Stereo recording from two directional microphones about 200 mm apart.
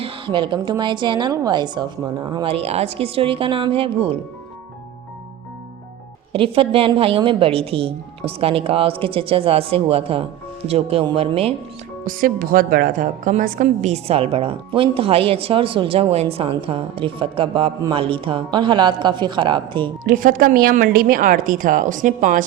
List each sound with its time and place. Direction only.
0.0 s a woman's voice: 25° right (ahead or behind)
6.3 s a woman's voice: 25° right (ahead or behind)
12.0 s a woman's voice: 45° right (ahead or behind); by 19.9 s 25° right (ahead or behind)
20.1 s speech: 45° right (ahead or behind)